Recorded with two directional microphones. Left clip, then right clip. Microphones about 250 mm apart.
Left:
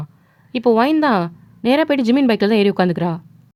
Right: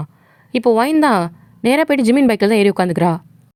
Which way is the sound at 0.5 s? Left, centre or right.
Right.